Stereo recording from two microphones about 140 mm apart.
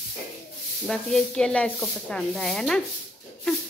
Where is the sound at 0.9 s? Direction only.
5° left (ahead or behind).